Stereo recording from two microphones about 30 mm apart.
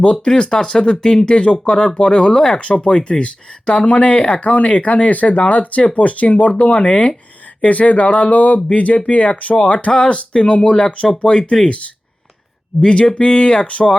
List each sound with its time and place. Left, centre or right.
0.3 s speech: left
7.6 s speech: left
12.8 s speech: left